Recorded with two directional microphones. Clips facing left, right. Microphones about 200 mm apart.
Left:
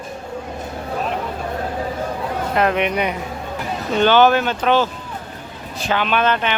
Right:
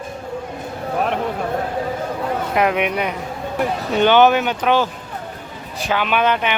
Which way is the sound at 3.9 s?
15° right (ahead or behind).